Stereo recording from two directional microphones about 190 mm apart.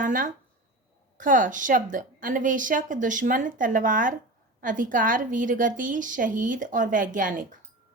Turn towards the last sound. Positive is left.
turn(degrees=-45)  # may be behind; listen again after turning